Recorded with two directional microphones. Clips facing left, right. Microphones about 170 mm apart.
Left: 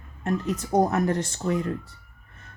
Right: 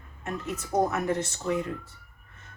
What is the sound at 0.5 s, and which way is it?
Speech, 30° left (ahead or behind).